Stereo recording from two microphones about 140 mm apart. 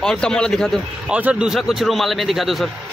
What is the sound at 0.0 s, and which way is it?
Speech, 5° left (ahead or behind).